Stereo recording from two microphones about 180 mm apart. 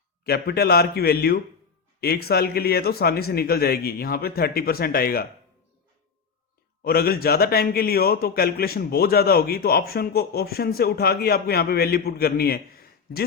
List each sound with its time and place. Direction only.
0.3 s a man's voice: 60° left (ahead or behind)
6.8 s a man's voice: 55° left (ahead or behind)